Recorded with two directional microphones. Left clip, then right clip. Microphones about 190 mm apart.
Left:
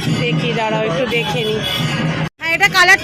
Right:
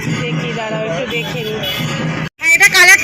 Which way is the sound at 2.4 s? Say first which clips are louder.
Right 4 dB; centre (ahead or behind).